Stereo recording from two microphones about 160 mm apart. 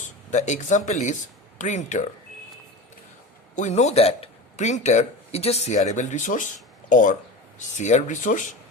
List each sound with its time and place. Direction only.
0.0 s speech: 50° left (ahead or behind)
3.5 s speech: 45° left (ahead or behind)